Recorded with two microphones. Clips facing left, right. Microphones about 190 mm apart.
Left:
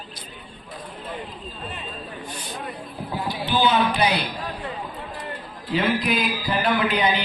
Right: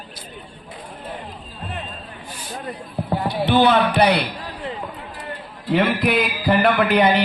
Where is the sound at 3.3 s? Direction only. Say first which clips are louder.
Right 5 dB; 60° right (ahead or behind).